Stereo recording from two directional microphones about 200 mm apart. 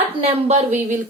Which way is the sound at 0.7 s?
10° right (ahead or behind).